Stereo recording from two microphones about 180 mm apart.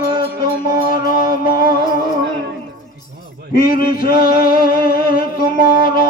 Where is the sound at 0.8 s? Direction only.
55° left (ahead or behind).